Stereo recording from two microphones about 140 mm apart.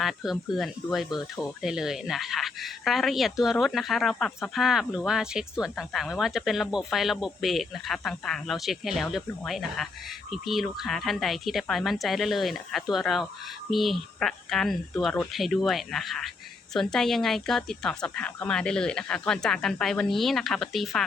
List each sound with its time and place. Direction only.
0.0 s speech: centre (ahead or behind)